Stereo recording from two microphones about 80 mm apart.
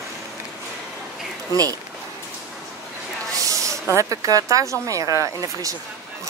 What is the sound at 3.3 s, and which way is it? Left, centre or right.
Speech, right.